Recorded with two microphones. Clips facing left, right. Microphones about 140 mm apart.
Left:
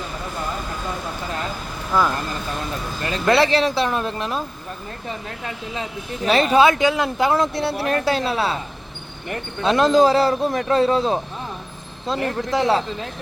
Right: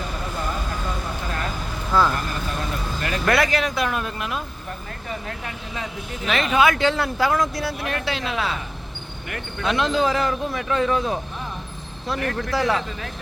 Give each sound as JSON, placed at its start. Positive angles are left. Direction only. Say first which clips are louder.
{"t": 1.9, "sound": "speech", "louder": "even", "side_deg": 10}
{"t": 3.0, "sound": "speech", "louder": "left 4 dB", "side_deg": 25}
{"t": 6.2, "sound": "speech", "louder": "left 4 dB", "side_deg": 35}
{"t": 6.7, "sound": "speech", "louder": "left 2 dB", "side_deg": 15}